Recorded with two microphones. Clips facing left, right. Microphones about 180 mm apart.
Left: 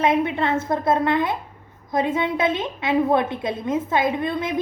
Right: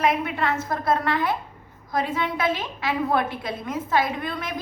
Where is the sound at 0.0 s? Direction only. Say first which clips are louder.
Left 3 dB; 25° left (ahead or behind).